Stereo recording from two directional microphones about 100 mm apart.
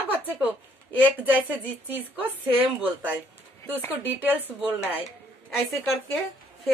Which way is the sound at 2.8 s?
15° right (ahead or behind).